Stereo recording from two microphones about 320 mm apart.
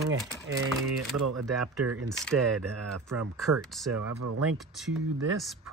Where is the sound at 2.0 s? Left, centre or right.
Centre.